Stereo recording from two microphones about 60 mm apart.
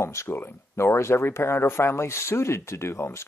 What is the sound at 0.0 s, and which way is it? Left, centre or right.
Speech, left.